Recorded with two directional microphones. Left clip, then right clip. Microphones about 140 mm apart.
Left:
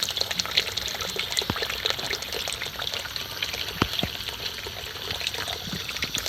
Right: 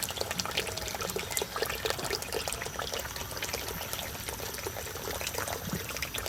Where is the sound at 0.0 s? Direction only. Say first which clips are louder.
Left 7 dB; 35° right (ahead or behind).